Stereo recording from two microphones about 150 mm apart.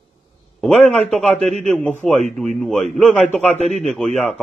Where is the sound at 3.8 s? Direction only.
5° left (ahead or behind).